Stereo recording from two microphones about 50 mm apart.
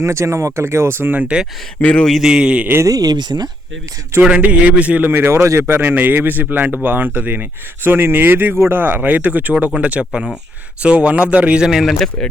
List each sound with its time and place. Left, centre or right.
0.0 s speech: right
1.3 s a man's voice: right
1.8 s speech: left
2.2 s a man's voice: centre
3.3 s speech: right
4.2 s a man's voice: right
5.0 s speech: right
5.3 s speech: right
9.0 s a man's voice: right
11.6 s speech: centre
11.9 s speech: centre